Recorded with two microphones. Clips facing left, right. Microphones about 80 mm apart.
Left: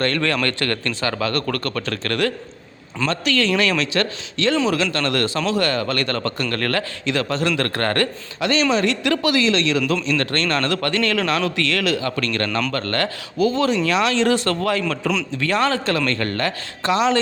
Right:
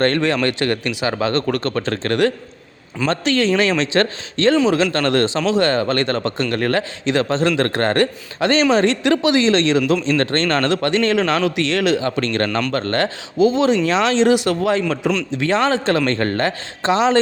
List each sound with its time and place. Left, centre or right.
0.4 s a man's voice: centre
8.4 s a woman's voice: right